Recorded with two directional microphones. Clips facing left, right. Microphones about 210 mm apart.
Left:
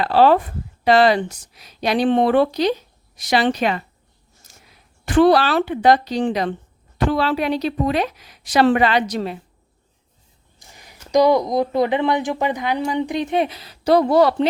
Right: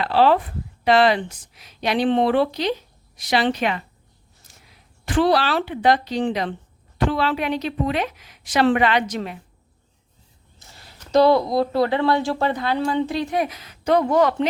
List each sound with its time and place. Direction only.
0.0 s a woman's voice: 45° left (ahead or behind)
4.4 s a sound: 45° left (ahead or behind)
5.0 s a woman's voice: 50° left (ahead or behind); by 9.4 s 35° left (ahead or behind)
10.6 s speech: 15° left (ahead or behind); by 14.4 s 35° left (ahead or behind)